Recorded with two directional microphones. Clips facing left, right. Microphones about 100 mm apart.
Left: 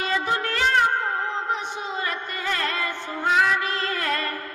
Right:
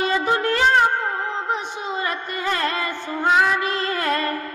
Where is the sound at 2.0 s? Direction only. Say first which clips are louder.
Right 3 dB; 20° right (ahead or behind).